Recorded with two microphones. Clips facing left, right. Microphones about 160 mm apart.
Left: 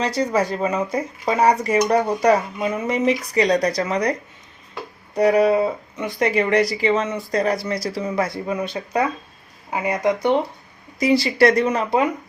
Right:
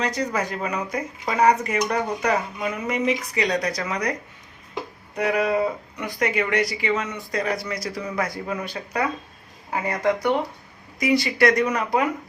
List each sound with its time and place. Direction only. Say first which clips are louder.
0.0 s speech: left 5 dB; 30° left (ahead or behind)
5.1 s speech: left 6 dB; 35° left (ahead or behind)